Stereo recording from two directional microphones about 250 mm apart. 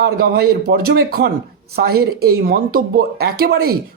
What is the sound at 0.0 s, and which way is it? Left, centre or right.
Speech, right.